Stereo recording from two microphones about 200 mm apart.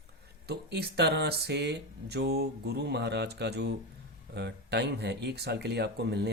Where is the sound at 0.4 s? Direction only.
55° right (ahead or behind).